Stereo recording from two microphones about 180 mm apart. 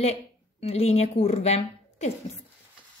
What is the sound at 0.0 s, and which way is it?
Speech, 35° left (ahead or behind).